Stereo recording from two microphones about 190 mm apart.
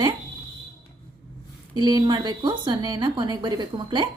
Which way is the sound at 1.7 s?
20° right (ahead or behind).